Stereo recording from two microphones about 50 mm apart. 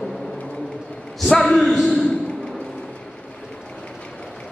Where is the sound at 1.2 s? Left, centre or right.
Centre.